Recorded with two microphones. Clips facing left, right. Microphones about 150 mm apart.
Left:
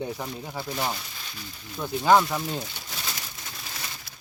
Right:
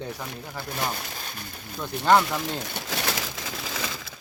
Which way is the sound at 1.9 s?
65° right (ahead or behind).